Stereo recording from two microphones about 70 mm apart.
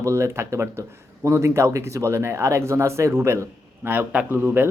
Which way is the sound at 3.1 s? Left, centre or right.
Right.